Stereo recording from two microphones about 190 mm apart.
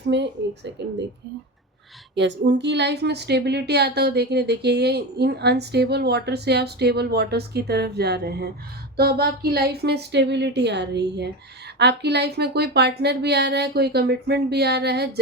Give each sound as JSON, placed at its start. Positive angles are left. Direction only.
{"t": 0.1, "sound": "speech", "side_deg": -65}
{"t": 2.1, "sound": "a woman's voice", "side_deg": -65}